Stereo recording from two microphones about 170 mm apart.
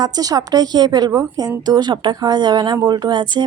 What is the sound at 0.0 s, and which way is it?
Speech, 20° right (ahead or behind).